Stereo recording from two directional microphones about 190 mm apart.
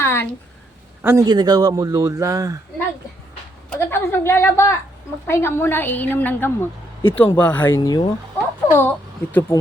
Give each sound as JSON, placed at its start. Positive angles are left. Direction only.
{"t": 0.0, "sound": "a sound", "side_deg": 10}
{"t": 1.0, "sound": "a man's voice", "side_deg": -15}
{"t": 3.7, "sound": "a woman's voice", "side_deg": 10}
{"t": 7.8, "sound": "speech", "side_deg": 20}
{"t": 8.7, "sound": "a woman's voice", "side_deg": 10}